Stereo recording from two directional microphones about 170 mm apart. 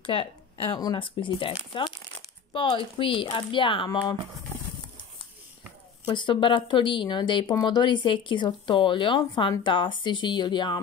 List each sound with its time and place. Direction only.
0.0 s speech: 30° left (ahead or behind)
6.0 s speech: 30° left (ahead or behind)